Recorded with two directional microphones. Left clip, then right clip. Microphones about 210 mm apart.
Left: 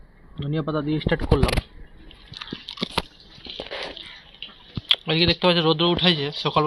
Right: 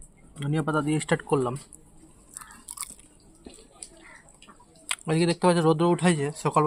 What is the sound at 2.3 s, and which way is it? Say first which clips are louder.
Biting: left 11 dB; 20° right (ahead or behind).